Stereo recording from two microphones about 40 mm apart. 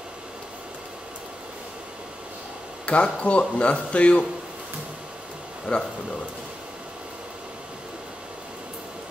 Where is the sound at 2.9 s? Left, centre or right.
Left.